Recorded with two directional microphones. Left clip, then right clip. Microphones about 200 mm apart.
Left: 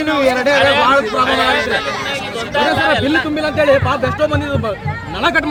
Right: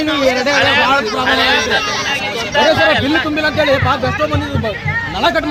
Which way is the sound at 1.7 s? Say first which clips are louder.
Right 2 dB; 40° left (ahead or behind).